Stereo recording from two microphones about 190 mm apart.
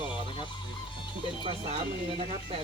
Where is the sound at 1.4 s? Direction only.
30° right (ahead or behind).